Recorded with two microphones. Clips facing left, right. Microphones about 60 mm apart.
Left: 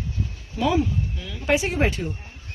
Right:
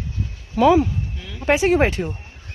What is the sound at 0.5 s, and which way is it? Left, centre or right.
Speech, right.